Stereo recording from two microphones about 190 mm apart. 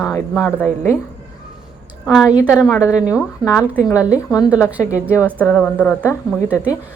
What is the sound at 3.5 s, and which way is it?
Speech, 5° right (ahead or behind).